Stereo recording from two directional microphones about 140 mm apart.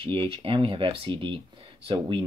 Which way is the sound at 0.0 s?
40° right (ahead or behind).